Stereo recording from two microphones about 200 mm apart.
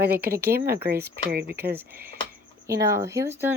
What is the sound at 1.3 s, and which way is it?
Speech, 50° right (ahead or behind).